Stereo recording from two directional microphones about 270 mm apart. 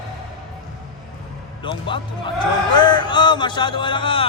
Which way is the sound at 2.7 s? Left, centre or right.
Centre.